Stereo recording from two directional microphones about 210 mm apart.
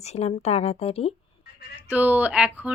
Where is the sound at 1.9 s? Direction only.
10° right (ahead or behind).